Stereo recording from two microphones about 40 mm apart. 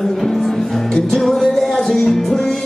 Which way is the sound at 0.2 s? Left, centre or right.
Centre.